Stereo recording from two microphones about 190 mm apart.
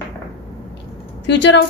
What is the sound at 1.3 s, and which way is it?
Speech, 65° left (ahead or behind).